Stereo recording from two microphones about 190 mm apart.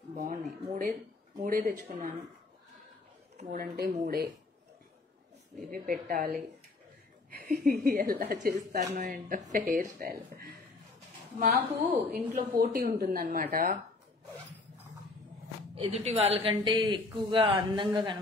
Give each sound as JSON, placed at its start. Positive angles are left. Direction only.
{"t": 0.1, "sound": "speech", "side_deg": -45}
{"t": 3.5, "sound": "speech", "side_deg": -55}
{"t": 5.7, "sound": "speech", "side_deg": -50}
{"t": 7.4, "sound": "speech", "side_deg": -45}
{"t": 11.5, "sound": "a woman's voice", "side_deg": -10}
{"t": 12.4, "sound": "speech", "side_deg": -45}
{"t": 15.7, "sound": "speech", "side_deg": -30}